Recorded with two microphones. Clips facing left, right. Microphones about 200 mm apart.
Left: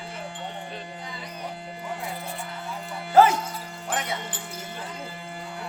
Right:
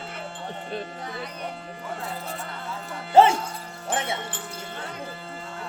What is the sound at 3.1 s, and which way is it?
Music, 25° right (ahead or behind).